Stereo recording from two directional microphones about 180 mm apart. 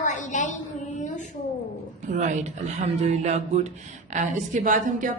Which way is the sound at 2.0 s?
40° right (ahead or behind).